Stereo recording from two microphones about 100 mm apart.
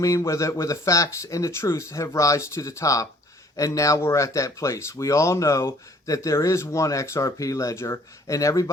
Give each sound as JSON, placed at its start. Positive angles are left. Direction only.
{"t": 0.0, "sound": "speech", "side_deg": 30}